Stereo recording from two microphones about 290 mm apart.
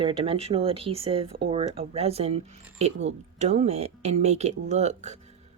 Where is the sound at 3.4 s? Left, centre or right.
Right.